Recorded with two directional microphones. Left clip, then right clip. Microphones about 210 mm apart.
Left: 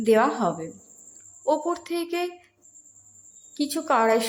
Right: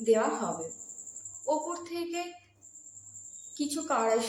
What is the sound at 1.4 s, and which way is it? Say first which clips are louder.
Speech: left 7 dB; 40° left (ahead or behind).